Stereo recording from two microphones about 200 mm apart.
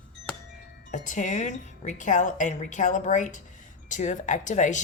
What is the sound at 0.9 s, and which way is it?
A woman's voice, 40° left (ahead or behind).